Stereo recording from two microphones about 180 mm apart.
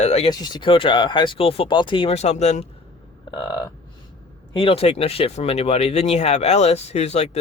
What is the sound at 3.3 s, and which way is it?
Speech, 25° left (ahead or behind).